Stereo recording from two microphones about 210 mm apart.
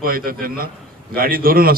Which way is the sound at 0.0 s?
45° right (ahead or behind).